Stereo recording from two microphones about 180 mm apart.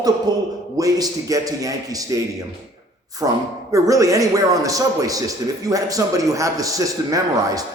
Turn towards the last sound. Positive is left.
turn(degrees=-20)  # may be behind; listen again after turning